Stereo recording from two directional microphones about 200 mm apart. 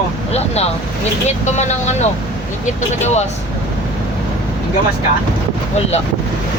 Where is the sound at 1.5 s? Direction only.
35° left (ahead or behind).